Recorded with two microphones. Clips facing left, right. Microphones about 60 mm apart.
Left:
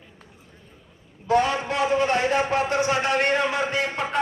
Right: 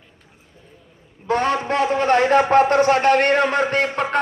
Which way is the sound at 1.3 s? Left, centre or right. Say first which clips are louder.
Right 2 dB; right.